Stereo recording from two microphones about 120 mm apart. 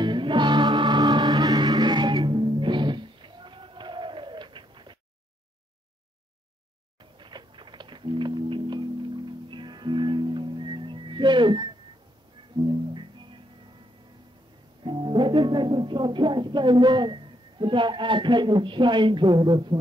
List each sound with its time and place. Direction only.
0.0 s music: 40° right (ahead or behind)
7.0 s music: 40° right (ahead or behind)
14.8 s speech: 40° right (ahead or behind)